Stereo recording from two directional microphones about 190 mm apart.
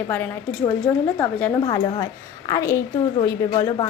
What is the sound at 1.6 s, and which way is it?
A woman's voice, 20° left (ahead or behind).